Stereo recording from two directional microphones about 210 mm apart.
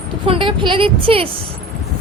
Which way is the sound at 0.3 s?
25° right (ahead or behind).